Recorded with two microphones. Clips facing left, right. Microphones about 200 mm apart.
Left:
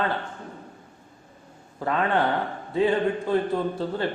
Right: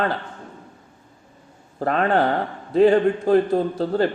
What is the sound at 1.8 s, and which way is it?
A man's voice, 45° right (ahead or behind).